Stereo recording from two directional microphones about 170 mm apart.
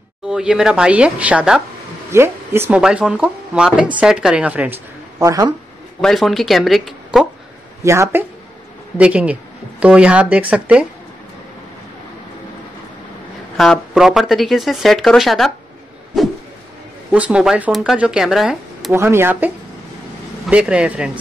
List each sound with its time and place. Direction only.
0.3 s speech: 5° right (ahead or behind)
5.2 s speech: 20° right (ahead or behind)
5.9 s speech: centre (ahead or behind)
7.8 s speech: 15° right (ahead or behind)
13.6 s speech: centre (ahead or behind)
16.1 s a sound: centre (ahead or behind)
17.1 s speech: 5° right (ahead or behind)
18.9 s speech: 15° right (ahead or behind)